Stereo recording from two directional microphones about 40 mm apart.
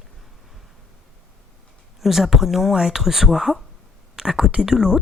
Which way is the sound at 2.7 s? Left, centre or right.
Centre.